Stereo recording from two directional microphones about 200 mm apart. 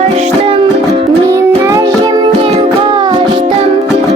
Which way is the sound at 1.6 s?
15° right (ahead or behind).